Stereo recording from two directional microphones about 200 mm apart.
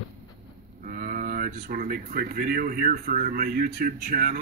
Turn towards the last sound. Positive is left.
turn(degrees=-50)  # may be behind; listen again after turning